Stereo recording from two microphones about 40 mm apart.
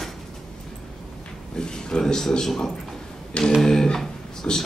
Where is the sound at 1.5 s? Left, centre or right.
Centre.